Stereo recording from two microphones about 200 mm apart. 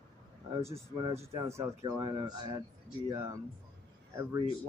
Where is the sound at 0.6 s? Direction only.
15° right (ahead or behind).